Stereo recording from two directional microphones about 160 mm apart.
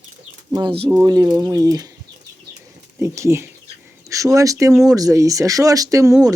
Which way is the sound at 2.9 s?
20° right (ahead or behind).